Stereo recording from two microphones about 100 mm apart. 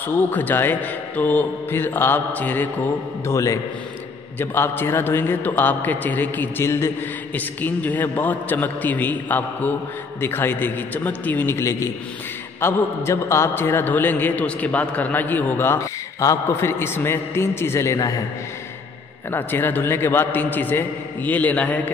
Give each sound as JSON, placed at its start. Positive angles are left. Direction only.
{"t": 0.0, "sound": "a man's voice", "side_deg": 20}
{"t": 3.3, "sound": "a man's voice", "side_deg": 30}
{"t": 19.3, "sound": "a man's voice", "side_deg": 20}